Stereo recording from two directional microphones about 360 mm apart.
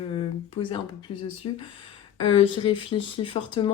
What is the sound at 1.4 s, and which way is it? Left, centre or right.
Speech, left.